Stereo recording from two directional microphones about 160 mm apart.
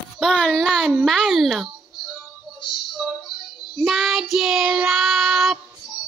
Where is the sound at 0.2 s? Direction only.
5° left (ahead or behind).